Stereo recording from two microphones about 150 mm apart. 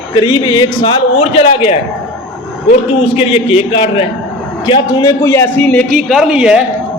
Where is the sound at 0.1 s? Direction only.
30° left (ahead or behind).